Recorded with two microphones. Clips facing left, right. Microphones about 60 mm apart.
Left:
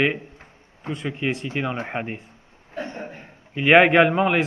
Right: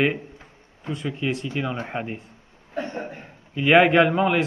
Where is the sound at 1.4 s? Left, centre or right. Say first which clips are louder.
Left 1 dB; left.